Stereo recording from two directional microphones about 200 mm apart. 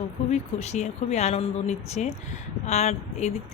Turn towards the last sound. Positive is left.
turn(degrees=35)  # may be behind; listen again after turning